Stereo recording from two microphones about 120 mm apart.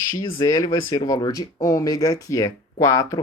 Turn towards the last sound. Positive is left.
turn(degrees=25)  # may be behind; listen again after turning